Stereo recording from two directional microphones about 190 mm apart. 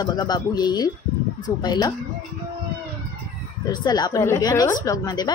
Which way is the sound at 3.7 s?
20° left (ahead or behind).